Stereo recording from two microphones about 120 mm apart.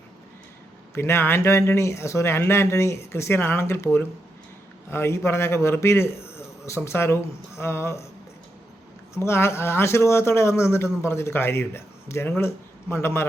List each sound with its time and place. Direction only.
0.9 s speech: 20° left (ahead or behind)
9.1 s a man's voice: 20° left (ahead or behind)